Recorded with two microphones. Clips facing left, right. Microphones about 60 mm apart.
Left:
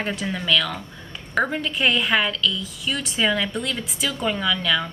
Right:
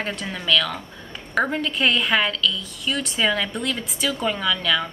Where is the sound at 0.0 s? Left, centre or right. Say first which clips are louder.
Left 2 dB; centre.